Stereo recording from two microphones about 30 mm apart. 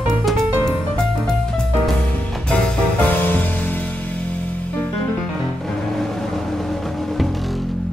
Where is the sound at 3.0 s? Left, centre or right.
Left.